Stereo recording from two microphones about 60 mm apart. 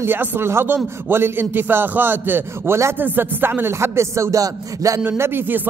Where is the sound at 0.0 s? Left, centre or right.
Right.